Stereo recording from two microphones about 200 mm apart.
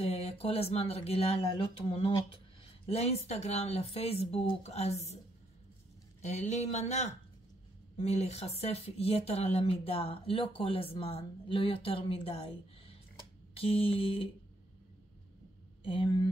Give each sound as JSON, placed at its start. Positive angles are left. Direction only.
{"t": 0.0, "sound": "speech", "side_deg": 30}
{"t": 6.2, "sound": "speech", "side_deg": 35}
{"t": 15.8, "sound": "speech", "side_deg": 25}